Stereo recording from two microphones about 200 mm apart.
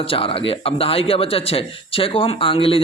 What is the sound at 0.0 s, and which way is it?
Speech, 25° left (ahead or behind).